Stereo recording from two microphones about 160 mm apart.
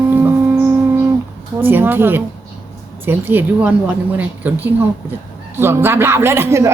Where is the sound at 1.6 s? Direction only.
15° right (ahead or behind).